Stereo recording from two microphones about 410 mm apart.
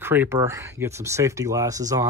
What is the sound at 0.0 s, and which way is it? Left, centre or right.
Speech, centre.